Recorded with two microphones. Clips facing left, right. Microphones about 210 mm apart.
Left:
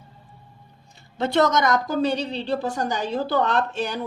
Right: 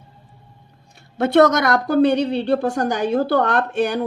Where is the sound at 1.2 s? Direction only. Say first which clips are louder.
Right 6 dB; 60° right (ahead or behind).